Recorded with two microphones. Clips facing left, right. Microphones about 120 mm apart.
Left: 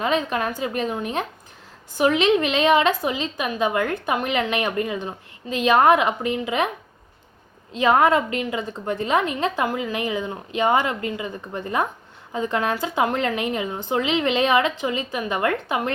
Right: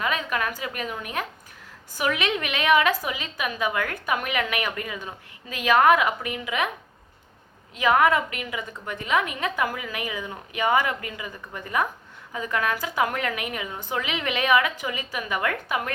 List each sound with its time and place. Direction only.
0.0 s a woman's voice: 25° left (ahead or behind)
7.7 s a woman's voice: 30° left (ahead or behind)